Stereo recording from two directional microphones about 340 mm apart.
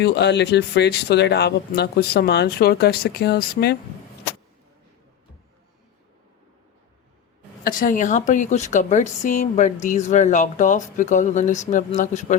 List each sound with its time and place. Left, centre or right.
0.0 s a woman's voice: left
7.6 s a woman's voice: left